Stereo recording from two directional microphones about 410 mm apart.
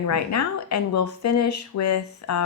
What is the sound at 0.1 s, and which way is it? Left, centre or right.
A woman's voice, left.